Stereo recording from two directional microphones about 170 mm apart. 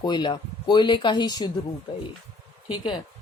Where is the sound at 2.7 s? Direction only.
30° left (ahead or behind).